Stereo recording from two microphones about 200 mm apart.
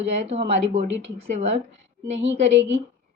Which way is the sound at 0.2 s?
30° right (ahead or behind).